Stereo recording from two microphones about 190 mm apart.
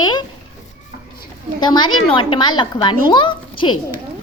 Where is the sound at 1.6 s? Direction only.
25° left (ahead or behind).